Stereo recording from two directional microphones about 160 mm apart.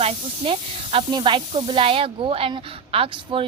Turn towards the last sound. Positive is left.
turn(degrees=-35)  # may be behind; listen again after turning